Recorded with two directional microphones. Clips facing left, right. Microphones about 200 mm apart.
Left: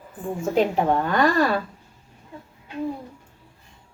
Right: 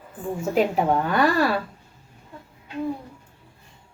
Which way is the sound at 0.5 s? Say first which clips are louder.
Even; 5° right (ahead or behind).